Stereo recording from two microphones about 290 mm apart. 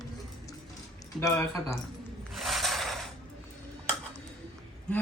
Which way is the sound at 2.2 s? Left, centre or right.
Centre.